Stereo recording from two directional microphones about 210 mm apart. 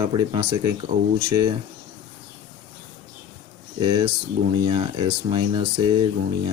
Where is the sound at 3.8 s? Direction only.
25° right (ahead or behind).